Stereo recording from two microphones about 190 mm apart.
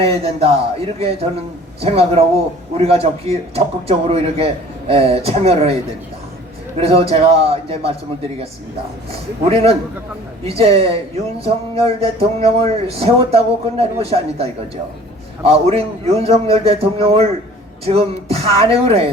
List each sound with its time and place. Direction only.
0.0 s speech: 30° right (ahead or behind)
6.7 s speech: 30° right (ahead or behind)
9.5 s speech: 30° right (ahead or behind)